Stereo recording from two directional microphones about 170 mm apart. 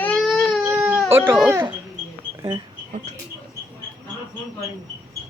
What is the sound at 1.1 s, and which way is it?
Speech, 15° right (ahead or behind).